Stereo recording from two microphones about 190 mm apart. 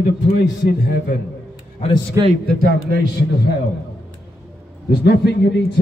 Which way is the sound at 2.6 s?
50° right (ahead or behind).